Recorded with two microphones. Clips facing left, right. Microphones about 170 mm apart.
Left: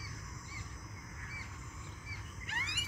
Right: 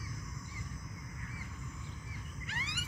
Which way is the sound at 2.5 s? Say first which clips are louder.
Right 1 dB; 55° left (ahead or behind).